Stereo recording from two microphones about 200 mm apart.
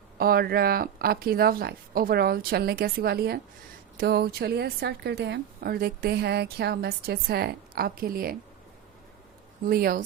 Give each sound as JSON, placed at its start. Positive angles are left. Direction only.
{"t": 0.2, "sound": "a woman's voice", "side_deg": -50}
{"t": 9.6, "sound": "a woman's voice", "side_deg": -50}